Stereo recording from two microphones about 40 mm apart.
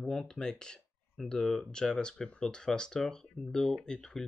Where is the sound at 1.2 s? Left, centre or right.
Centre.